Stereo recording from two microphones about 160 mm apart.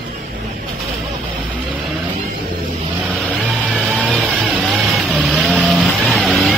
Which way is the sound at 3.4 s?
Centre (ahead or behind).